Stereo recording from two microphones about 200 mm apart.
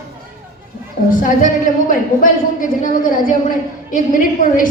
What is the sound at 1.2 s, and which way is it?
Speech, 40° left (ahead or behind).